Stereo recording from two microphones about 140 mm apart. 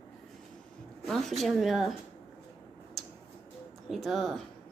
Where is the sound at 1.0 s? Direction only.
Centre (ahead or behind).